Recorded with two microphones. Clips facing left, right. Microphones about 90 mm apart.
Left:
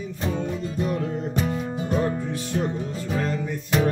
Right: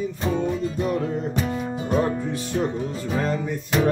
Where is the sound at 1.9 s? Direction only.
30° right (ahead or behind).